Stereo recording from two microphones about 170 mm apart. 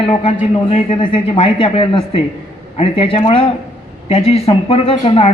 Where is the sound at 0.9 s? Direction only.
30° left (ahead or behind).